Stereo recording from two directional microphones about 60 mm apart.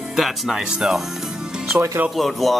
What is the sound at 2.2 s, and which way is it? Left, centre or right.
Speech, centre.